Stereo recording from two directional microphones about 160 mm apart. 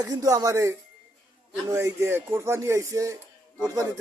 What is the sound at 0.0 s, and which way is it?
A man's voice, 20° right (ahead or behind).